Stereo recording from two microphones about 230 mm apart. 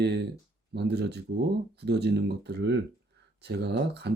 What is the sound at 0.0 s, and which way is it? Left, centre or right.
Speech, right.